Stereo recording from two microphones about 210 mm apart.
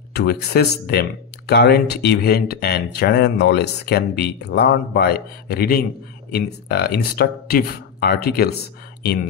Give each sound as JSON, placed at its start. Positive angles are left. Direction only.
{"t": 0.1, "sound": "speech", "side_deg": 50}